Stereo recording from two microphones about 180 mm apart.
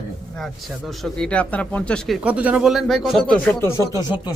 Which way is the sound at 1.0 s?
5° left (ahead or behind).